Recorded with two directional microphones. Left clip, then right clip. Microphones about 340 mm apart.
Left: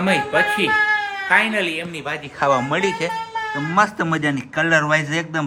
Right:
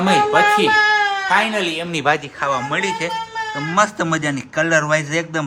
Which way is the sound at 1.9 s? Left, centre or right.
Right.